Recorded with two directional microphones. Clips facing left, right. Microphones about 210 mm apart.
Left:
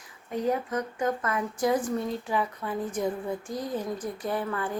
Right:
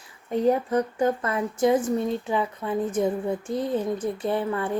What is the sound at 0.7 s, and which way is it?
Speech, 30° right (ahead or behind).